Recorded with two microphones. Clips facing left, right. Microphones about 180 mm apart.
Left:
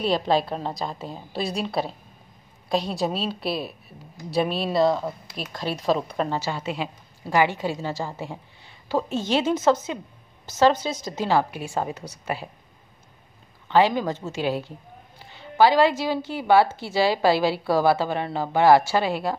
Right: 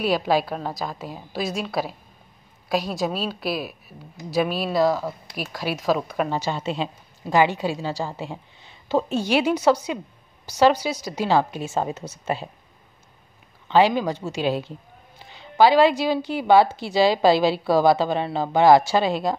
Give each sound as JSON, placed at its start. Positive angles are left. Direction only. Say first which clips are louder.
{"t": 0.1, "sound": "a woman's voice", "louder": "even", "side_deg": -5}
{"t": 10.9, "sound": "a woman's voice", "louder": "right 2 dB", "side_deg": 25}
{"t": 11.2, "sound": "a woman's voice", "louder": "right 2 dB", "side_deg": -20}
{"t": 13.7, "sound": "a woman's voice", "louder": "right 2 dB", "side_deg": -15}